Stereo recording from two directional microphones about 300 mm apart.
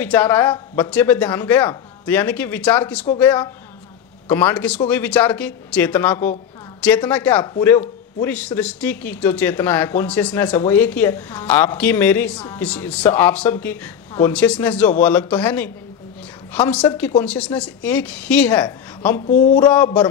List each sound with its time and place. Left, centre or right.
0.0 s speech: centre
19.2 s a sound: left
19.6 s speech: centre